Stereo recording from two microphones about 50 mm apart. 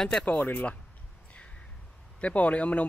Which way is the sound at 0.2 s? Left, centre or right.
Left.